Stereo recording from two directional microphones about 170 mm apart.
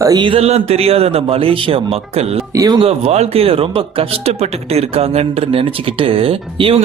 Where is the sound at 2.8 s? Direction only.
35° right (ahead or behind).